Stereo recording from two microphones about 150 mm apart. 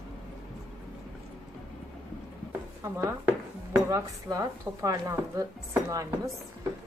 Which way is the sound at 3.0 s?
15° right (ahead or behind).